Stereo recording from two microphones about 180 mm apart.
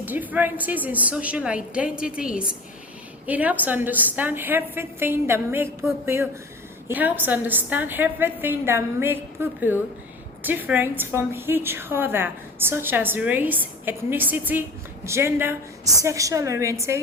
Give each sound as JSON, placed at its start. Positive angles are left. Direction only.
{"t": 0.0, "sound": "a woman's voice", "side_deg": -10}